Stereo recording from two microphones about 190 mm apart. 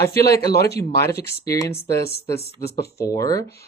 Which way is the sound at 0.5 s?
60° left (ahead or behind).